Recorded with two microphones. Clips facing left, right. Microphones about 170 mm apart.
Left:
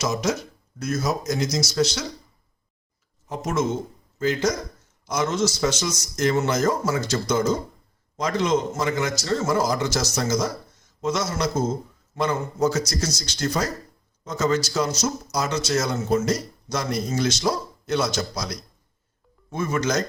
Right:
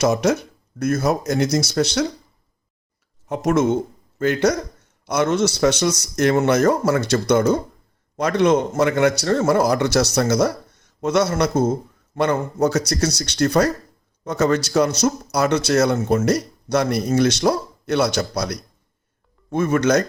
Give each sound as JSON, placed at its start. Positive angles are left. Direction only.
{"t": 0.0, "sound": "speech", "side_deg": -60}
{"t": 3.2, "sound": "speech", "side_deg": -65}